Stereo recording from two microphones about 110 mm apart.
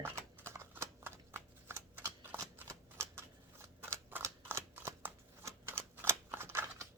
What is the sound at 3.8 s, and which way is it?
Scissors, 20° right (ahead or behind).